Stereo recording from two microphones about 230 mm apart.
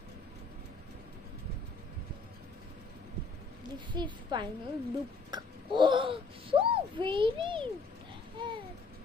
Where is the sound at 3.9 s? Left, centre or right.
Centre.